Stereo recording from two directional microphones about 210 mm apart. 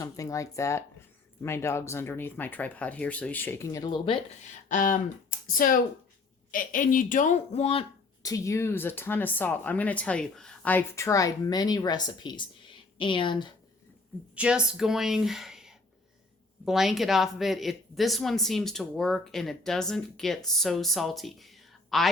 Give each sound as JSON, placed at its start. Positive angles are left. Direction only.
{"t": 0.0, "sound": "speech", "side_deg": 15}
{"t": 4.7, "sound": "speech", "side_deg": 40}
{"t": 8.2, "sound": "a woman's voice", "side_deg": 15}
{"t": 14.3, "sound": "a woman's voice", "side_deg": -5}